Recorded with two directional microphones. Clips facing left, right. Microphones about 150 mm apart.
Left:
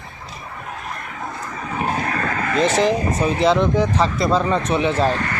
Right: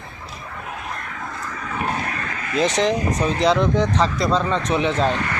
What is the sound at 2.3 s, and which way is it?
Vehicle, 55° left (ahead or behind).